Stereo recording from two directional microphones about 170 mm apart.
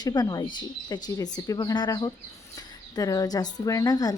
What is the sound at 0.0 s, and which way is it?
A woman's voice, 25° left (ahead or behind).